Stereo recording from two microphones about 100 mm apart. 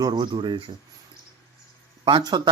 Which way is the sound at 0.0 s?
45° right (ahead or behind).